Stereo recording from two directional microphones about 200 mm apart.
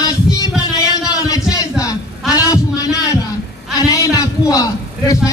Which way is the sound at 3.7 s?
15° left (ahead or behind).